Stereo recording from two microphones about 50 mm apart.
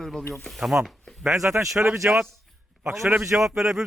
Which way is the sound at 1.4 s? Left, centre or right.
Right.